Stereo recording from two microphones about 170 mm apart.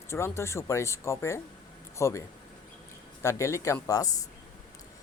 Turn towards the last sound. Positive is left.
turn(degrees=20)  # may be behind; listen again after turning